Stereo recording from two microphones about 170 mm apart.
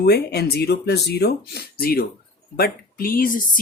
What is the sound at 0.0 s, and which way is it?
Speech, 70° left (ahead or behind).